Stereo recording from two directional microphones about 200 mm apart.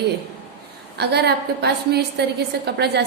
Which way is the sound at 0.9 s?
55° right (ahead or behind).